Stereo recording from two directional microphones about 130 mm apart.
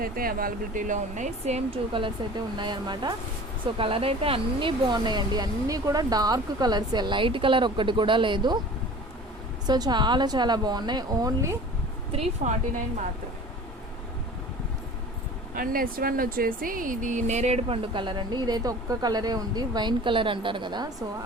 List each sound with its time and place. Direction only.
0.2 s speech: 90° right; by 3.2 s 35° right (ahead or behind)
3.8 s speech: 45° right (ahead or behind)
9.6 s speech: 30° right (ahead or behind)
12.4 s a woman's voice: 65° right (ahead or behind)
15.5 s speech: 90° right; by 17.7 s 60° right (ahead or behind)
17.9 s speech: 40° right (ahead or behind)